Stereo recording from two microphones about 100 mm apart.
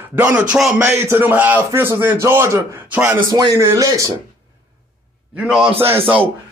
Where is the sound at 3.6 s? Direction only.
30° right (ahead or behind).